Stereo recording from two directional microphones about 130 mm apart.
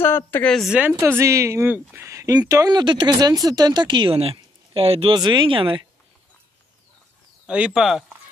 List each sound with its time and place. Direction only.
0.0 s speech: 15° left (ahead or behind)
0.5 s speech: centre (ahead or behind)
0.7 s a woman's voice: 10° right (ahead or behind); by 5.1 s 45° right (ahead or behind)
5.1 s speech: 35° right (ahead or behind)
7.4 s speech: 5° right (ahead or behind)